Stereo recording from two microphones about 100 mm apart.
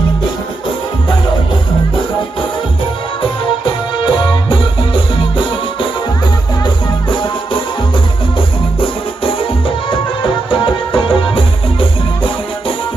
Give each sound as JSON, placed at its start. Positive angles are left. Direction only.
{"t": 3.2, "sound": "music", "side_deg": 55}